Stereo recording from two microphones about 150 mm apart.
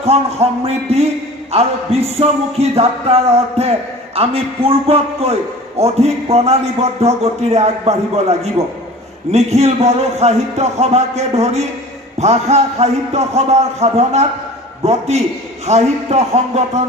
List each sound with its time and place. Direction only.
0.0 s music: 45° right (ahead or behind)